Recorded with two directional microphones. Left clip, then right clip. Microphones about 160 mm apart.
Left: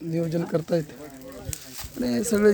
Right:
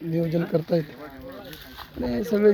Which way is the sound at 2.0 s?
25° left (ahead or behind).